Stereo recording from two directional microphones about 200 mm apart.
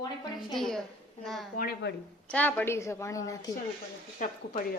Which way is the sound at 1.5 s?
50° left (ahead or behind).